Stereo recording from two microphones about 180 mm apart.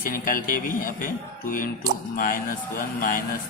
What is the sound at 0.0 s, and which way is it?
A man's voice, 50° left (ahead or behind).